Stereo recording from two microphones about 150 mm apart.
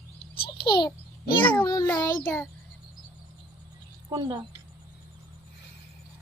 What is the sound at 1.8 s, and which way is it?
Child singing, 10° left (ahead or behind).